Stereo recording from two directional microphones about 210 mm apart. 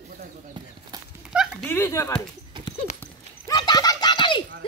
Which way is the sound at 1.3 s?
5° right (ahead or behind).